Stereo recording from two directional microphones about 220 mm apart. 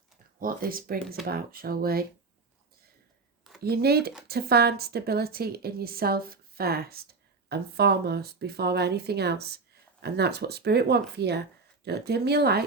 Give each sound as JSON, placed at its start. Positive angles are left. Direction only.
{"t": 0.3, "sound": "a woman's voice", "side_deg": -40}
{"t": 3.6, "sound": "a woman's voice", "side_deg": -45}